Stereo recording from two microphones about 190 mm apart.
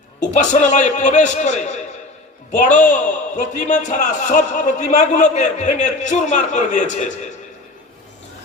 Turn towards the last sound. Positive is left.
turn(degrees=40)  # may be behind; listen again after turning